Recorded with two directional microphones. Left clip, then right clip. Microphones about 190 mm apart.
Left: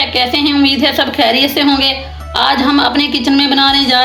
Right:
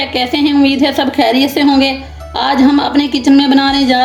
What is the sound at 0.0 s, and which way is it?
A woman's voice, 45° right (ahead or behind).